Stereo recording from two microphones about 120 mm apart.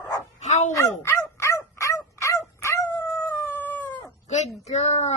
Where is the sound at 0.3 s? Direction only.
70° left (ahead or behind).